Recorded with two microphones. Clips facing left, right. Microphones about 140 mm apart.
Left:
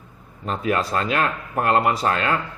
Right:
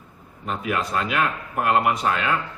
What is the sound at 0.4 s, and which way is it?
Speech, 35° left (ahead or behind).